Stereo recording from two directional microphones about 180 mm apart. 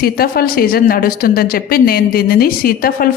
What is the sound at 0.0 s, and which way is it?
A woman's voice, 55° left (ahead or behind).